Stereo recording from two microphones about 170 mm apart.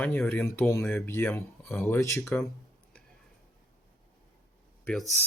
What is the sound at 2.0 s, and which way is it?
Speech, 20° left (ahead or behind).